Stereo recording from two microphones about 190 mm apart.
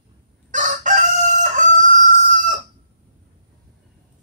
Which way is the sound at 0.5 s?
40° right (ahead or behind).